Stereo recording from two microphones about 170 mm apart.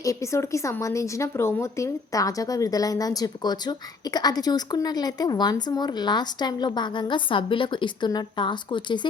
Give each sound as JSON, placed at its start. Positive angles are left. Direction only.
{"t": 0.0, "sound": "speech", "side_deg": 20}